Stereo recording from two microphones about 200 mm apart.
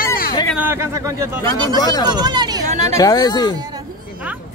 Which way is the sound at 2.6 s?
35° right (ahead or behind).